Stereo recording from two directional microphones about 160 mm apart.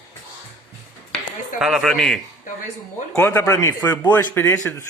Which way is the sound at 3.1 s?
15° left (ahead or behind).